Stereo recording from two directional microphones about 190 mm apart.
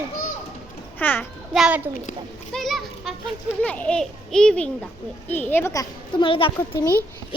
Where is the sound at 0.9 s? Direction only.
10° left (ahead or behind).